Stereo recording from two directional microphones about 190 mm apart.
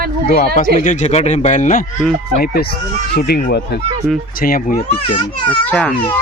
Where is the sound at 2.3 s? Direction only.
55° left (ahead or behind).